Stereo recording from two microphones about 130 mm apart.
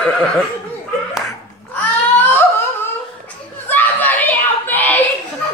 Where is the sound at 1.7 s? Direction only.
15° left (ahead or behind).